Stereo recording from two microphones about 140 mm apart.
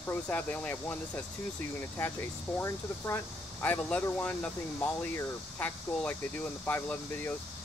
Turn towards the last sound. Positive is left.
turn(degrees=15)  # may be behind; listen again after turning